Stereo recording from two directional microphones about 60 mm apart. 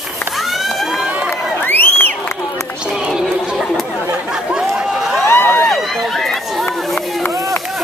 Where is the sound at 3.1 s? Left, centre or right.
Centre.